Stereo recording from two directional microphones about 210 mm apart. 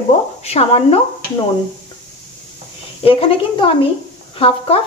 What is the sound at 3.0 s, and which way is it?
Speech, 25° left (ahead or behind).